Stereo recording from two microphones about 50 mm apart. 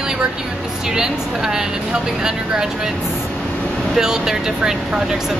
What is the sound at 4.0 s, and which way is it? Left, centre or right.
Speech, centre.